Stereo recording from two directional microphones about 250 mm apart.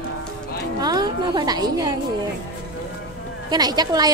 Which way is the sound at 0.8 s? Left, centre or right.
Centre.